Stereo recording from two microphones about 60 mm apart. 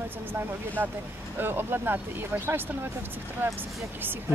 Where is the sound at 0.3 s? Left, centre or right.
Right.